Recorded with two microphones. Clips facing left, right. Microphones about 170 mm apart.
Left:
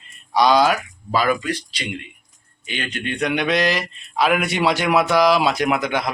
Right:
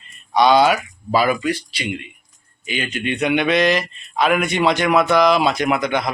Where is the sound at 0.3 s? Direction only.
Centre (ahead or behind).